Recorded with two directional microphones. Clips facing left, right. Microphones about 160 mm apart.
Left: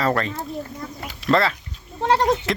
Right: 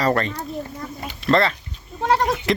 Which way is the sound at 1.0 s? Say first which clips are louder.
Right 1 dB; 5° left (ahead or behind).